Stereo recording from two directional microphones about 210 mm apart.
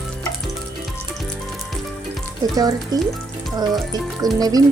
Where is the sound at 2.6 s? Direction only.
15° right (ahead or behind).